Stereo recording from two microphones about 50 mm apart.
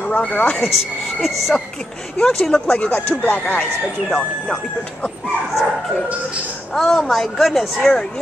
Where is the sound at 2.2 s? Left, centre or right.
Centre.